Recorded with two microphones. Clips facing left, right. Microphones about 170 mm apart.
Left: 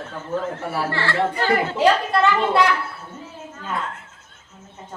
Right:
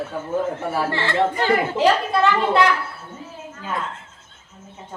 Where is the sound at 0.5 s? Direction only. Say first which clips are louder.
Right 2 dB; 20° right (ahead or behind).